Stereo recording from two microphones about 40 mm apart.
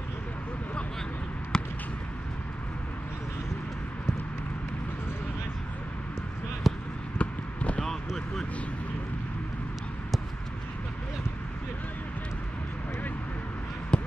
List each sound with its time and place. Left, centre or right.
1.5 s basketball bounce: centre
6.7 s basketball bounce: centre
7.2 s basketball bounce: left
7.8 s a sound: centre
13.9 s basketball bounce: left